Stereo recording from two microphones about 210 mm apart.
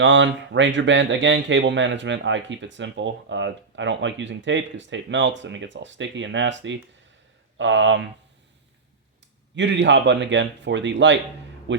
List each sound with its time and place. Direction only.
0.0 s speech: 60° right (ahead or behind)
9.6 s speech: 55° right (ahead or behind)